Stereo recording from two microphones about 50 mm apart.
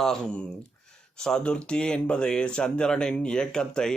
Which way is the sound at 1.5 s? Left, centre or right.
Left.